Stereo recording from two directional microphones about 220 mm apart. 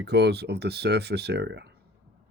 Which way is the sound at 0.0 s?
50° right (ahead or behind).